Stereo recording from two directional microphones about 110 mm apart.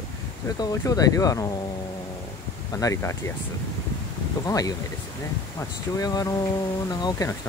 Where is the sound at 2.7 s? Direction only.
30° left (ahead or behind).